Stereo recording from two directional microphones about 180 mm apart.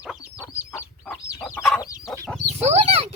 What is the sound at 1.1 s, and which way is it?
Chicken, 5° left (ahead or behind).